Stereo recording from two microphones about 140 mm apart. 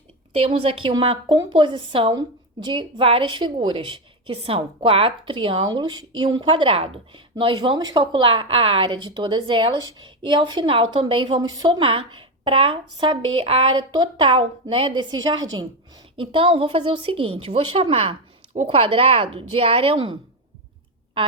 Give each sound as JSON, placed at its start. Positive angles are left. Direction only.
{"t": 0.3, "sound": "a woman's voice", "side_deg": -45}